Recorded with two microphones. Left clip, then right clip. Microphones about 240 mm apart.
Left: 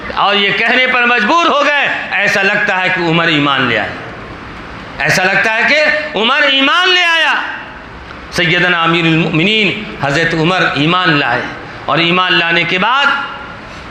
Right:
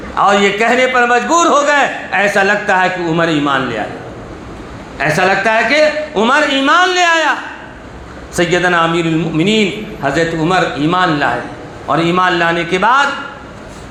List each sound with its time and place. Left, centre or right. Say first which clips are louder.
0.2 s a man's voice: right 1 dB; left
4.9 s a man's voice: left 1 dB; left
8.4 s a man's voice: left 1 dB; left